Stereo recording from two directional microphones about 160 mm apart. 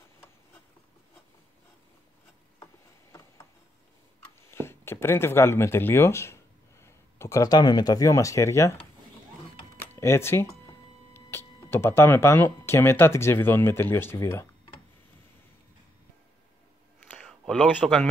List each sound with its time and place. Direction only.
4.4 s speech: 15° left (ahead or behind)
9.9 s speech: 15° left (ahead or behind)
17.2 s a sound: 5° left (ahead or behind)
17.7 s a man's voice: centre (ahead or behind)